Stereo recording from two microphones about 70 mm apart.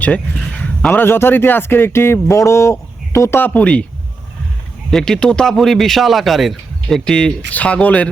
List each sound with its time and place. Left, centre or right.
0.0 s speech: centre
0.9 s speech: left
3.4 s speech: centre
4.9 s speech: centre